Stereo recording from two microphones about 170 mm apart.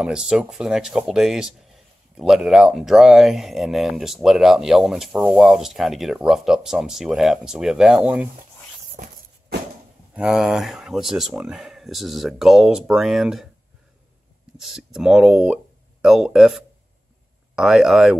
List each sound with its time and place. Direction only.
0.0 s speech: 5° right (ahead or behind)
9.0 s a sound: 55° right (ahead or behind)
10.1 s speech: 5° right (ahead or behind)
14.6 s speech: 5° right (ahead or behind)